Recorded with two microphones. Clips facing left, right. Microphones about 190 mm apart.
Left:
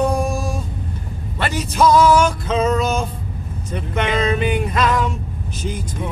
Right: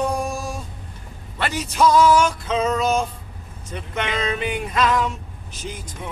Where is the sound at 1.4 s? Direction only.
45° left (ahead or behind).